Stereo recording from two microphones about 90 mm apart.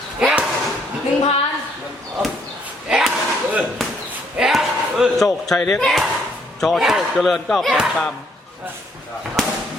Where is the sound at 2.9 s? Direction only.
5° right (ahead or behind).